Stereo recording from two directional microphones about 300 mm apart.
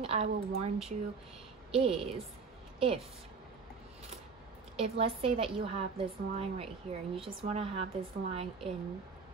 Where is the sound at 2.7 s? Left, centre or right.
Centre.